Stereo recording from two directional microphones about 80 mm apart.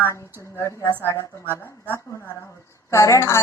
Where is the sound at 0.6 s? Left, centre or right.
Left.